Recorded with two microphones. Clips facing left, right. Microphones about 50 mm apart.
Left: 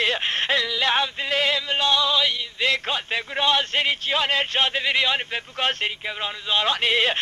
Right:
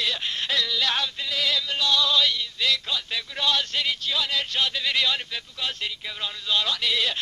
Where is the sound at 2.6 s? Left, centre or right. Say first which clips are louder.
Left 4 dB; left.